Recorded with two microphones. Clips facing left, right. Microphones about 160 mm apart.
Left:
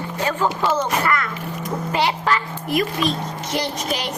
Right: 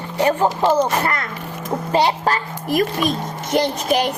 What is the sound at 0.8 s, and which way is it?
A woman's voice, 30° right (ahead or behind).